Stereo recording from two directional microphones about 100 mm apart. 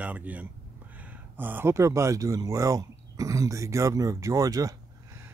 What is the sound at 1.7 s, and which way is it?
Speech, 30° right (ahead or behind).